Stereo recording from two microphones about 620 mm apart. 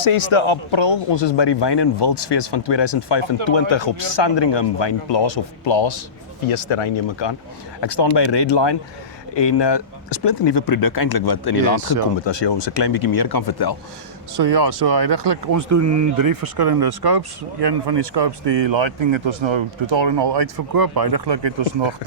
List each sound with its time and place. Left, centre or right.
0.0 s speech: left
14.3 s speech: right